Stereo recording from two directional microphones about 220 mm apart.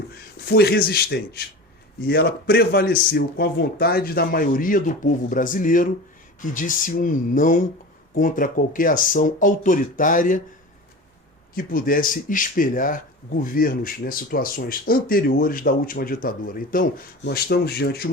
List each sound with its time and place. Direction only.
0.1 s a man's voice: 45° left (ahead or behind)
11.5 s a man's voice: 40° left (ahead or behind)